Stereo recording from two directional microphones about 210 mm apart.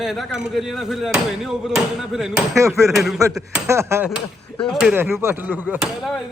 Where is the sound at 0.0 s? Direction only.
Centre (ahead or behind).